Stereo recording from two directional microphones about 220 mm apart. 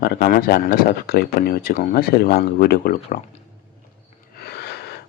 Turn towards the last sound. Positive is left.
turn(degrees=45)  # may be behind; listen again after turning